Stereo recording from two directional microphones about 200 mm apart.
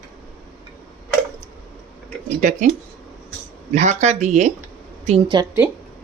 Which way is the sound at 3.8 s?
35° right (ahead or behind).